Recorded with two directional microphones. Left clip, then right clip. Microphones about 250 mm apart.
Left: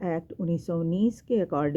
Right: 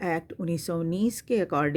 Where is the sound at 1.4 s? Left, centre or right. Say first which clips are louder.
Right 1 dB; right.